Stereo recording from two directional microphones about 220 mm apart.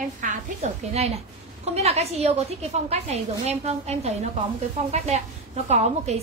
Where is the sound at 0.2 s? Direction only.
30° right (ahead or behind).